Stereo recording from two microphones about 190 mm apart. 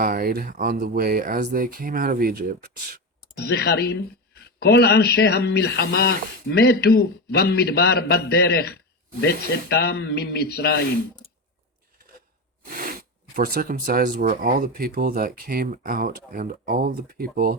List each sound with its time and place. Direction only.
0.0 s speech: 50° right (ahead or behind)
3.3 s speech: 55° left (ahead or behind)
12.6 s speech: 50° right (ahead or behind)